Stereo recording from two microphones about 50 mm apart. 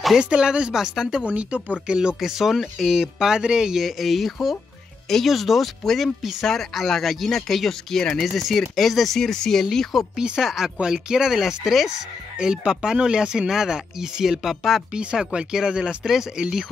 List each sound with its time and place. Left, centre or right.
0.2 s speech: centre
1.3 s speech: right
2.1 s speech: centre
3.8 s speech: centre
8.2 s speech: centre
10.4 s speech: centre
14.9 s speech: right